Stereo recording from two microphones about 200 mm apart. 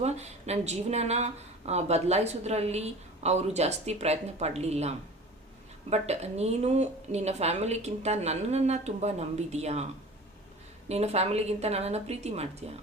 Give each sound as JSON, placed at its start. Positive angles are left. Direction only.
{"t": 0.0, "sound": "speech", "side_deg": -35}
{"t": 10.8, "sound": "speech", "side_deg": -30}